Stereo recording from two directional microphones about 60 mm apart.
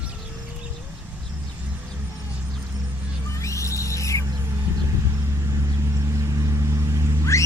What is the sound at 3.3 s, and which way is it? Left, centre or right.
Owl, left.